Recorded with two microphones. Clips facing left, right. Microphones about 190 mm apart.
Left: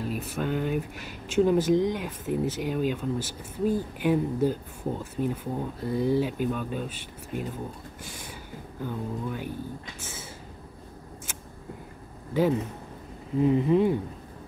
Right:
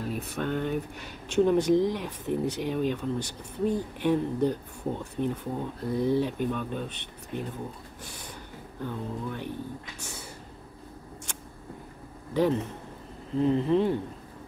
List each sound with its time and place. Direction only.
0.0 s speech: centre (ahead or behind)
8.8 s speech: 5° left (ahead or behind)
9.9 s a sound: 5° left (ahead or behind)
13.4 s speech: 10° left (ahead or behind)